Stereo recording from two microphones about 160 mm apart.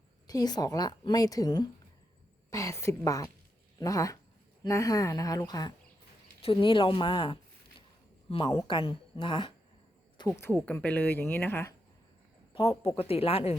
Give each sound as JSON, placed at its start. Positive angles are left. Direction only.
{"t": 0.3, "sound": "a woman's voice", "side_deg": 25}
{"t": 10.4, "sound": "speech", "side_deg": 10}
{"t": 12.5, "sound": "a woman's voice", "side_deg": 35}